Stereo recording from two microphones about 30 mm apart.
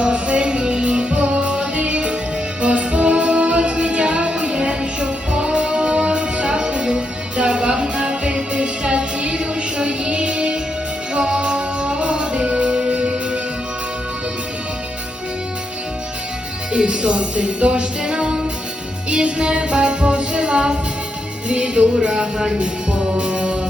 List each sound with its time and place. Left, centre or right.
0.0 s music: right
16.7 s music: right
22.0 s a sound: right
22.5 s music: right